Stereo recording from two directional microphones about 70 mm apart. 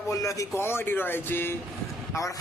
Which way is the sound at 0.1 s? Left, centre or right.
Left.